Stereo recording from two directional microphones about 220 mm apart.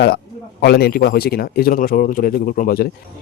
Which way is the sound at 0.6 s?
45° left (ahead or behind).